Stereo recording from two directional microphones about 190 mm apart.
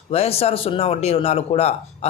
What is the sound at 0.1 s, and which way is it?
Speech, 30° left (ahead or behind).